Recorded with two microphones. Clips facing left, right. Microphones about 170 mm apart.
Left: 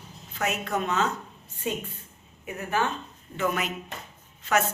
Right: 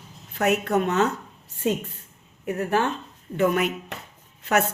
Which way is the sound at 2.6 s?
60° right (ahead or behind).